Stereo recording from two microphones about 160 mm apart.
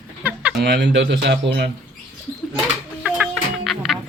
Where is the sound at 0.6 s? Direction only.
90° right.